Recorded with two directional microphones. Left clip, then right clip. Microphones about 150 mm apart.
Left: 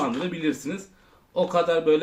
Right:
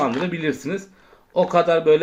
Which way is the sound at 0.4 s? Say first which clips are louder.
Right 3 dB; 30° right (ahead or behind).